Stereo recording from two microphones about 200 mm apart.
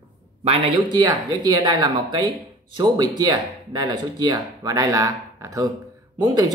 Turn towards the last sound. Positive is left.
turn(degrees=-20)  # may be behind; listen again after turning